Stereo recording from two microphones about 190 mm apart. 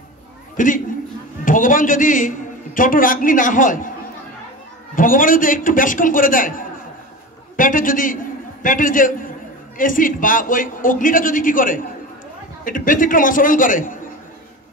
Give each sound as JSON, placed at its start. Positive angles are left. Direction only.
{"t": 0.6, "sound": "a man's voice", "side_deg": 45}
{"t": 4.9, "sound": "a man's voice", "side_deg": 45}